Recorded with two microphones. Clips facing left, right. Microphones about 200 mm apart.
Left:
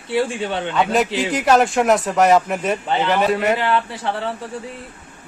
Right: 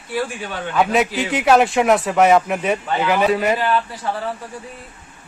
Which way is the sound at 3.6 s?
25° left (ahead or behind).